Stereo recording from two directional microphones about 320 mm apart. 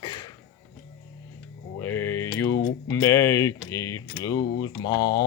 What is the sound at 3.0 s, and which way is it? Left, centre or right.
Speech, centre.